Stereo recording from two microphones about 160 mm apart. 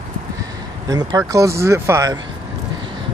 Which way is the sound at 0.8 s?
25° right (ahead or behind).